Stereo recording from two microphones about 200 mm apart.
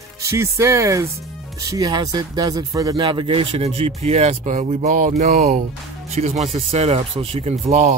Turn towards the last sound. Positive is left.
turn(degrees=-35)  # may be behind; listen again after turning